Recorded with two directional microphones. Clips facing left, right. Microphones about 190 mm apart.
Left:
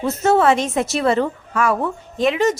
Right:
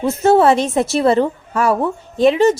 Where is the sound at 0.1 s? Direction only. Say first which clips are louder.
Right 3 dB; 30° right (ahead or behind).